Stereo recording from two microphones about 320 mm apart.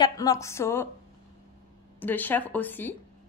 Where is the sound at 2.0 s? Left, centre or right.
Centre.